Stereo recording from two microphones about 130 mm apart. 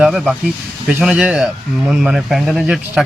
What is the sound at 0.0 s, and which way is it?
Speech, centre (ahead or behind).